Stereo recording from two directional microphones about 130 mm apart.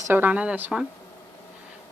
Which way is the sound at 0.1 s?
15° right (ahead or behind).